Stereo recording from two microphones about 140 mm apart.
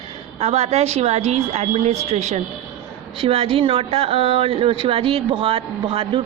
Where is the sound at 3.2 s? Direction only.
40° right (ahead or behind).